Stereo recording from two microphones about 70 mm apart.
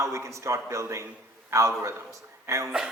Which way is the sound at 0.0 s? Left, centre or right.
Right.